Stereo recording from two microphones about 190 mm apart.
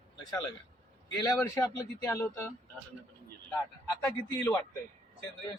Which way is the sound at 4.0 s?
10° left (ahead or behind).